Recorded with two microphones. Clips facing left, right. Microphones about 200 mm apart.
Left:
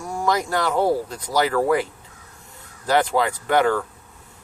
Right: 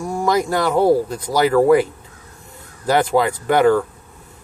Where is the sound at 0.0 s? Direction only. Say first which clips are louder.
Right 4 dB; 10° right (ahead or behind).